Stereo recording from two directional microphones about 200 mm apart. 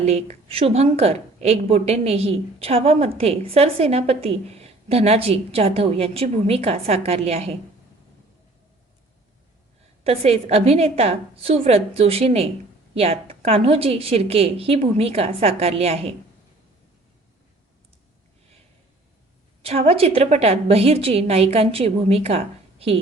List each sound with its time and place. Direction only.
0.0 s a woman's voice: 35° right (ahead or behind)
10.0 s a woman's voice: 30° right (ahead or behind)
19.6 s a woman's voice: 30° right (ahead or behind)